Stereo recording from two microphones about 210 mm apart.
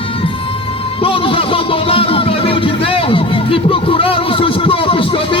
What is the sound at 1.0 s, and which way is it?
Music, 25° left (ahead or behind).